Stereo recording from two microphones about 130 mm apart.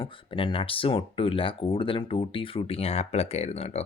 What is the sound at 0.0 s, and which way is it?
Speech, 45° left (ahead or behind).